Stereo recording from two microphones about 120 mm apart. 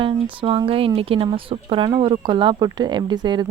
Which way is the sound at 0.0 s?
45° right (ahead or behind).